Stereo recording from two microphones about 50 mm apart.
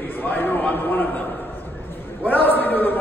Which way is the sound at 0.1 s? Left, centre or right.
Left.